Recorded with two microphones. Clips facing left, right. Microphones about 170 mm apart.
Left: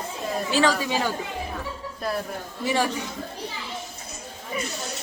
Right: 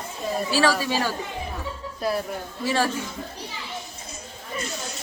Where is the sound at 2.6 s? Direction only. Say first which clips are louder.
Even; 15° left (ahead or behind).